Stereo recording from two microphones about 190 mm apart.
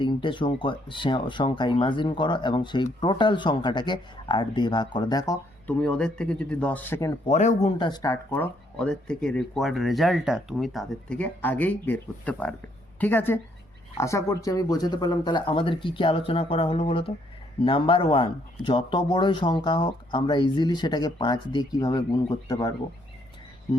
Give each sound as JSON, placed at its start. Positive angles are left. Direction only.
{"t": 0.0, "sound": "speech", "side_deg": 25}
{"t": 5.8, "sound": "speech", "side_deg": 5}
{"t": 7.3, "sound": "speech", "side_deg": 35}
{"t": 7.8, "sound": "speech", "side_deg": 20}